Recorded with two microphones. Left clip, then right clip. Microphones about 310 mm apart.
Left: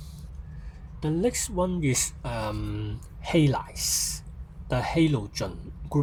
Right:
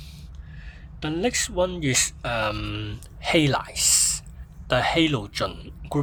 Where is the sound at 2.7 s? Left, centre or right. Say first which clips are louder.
Right 4 dB; right.